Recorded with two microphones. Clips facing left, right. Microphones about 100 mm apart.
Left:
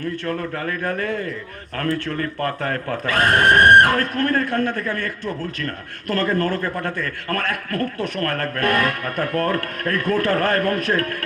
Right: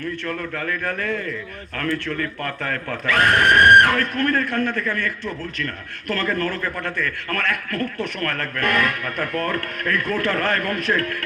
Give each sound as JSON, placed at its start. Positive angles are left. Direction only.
{"t": 0.3, "sound": "speech", "side_deg": 35}